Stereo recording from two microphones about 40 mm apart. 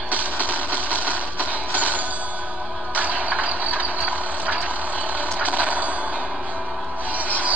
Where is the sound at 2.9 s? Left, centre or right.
Right.